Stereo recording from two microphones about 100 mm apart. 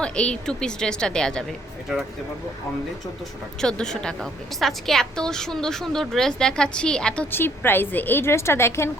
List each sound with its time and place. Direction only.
0.0 s a woman's voice: 10° left (ahead or behind)
3.6 s a woman's voice: 5° left (ahead or behind)
7.3 s a woman's voice: 20° left (ahead or behind)